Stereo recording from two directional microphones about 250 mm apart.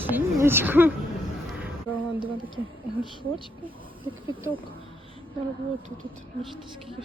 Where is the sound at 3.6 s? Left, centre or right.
Centre.